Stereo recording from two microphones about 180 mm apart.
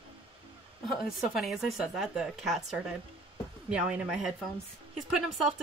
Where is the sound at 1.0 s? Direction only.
Centre (ahead or behind).